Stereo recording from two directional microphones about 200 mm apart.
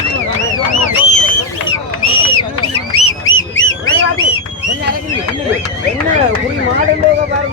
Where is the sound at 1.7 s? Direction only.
90° left; by 3.8 s 75° left (ahead or behind).